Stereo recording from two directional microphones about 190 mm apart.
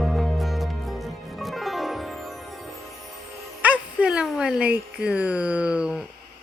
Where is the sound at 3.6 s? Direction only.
5° right (ahead or behind).